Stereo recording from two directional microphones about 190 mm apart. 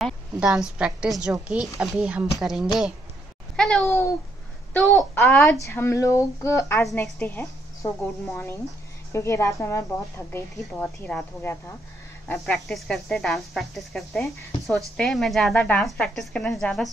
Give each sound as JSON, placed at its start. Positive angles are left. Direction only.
{"t": 0.0, "sound": "a woman's voice", "side_deg": -5}